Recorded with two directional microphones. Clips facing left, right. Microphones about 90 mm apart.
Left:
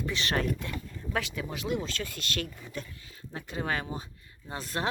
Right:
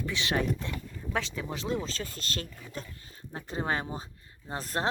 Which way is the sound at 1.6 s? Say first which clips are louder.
Left 1 dB; 30° right (ahead or behind).